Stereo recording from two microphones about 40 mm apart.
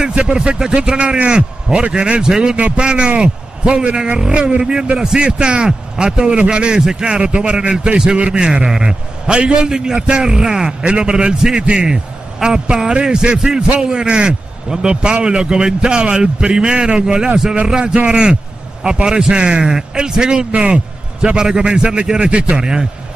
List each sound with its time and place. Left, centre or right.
0.1 s speech: right
2.5 s a man's voice: right
2.8 s speech: right
10.8 s a man's voice: right